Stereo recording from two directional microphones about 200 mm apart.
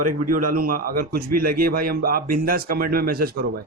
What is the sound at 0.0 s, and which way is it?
A man's voice, 40° right (ahead or behind).